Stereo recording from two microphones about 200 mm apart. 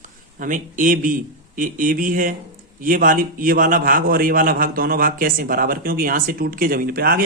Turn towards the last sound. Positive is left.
turn(degrees=-50)  # may be behind; listen again after turning